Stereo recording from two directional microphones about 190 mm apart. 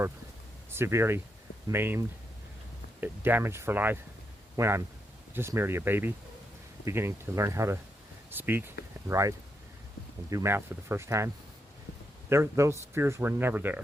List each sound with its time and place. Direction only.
0.7 s a man's voice: 15° right (ahead or behind)
12.3 s speech: 15° right (ahead or behind)